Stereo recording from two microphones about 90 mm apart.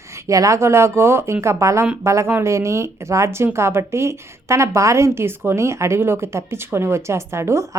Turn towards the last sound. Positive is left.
turn(degrees=-30)  # may be behind; listen again after turning